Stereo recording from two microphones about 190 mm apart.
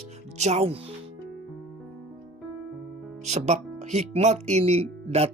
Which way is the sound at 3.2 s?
35° right (ahead or behind).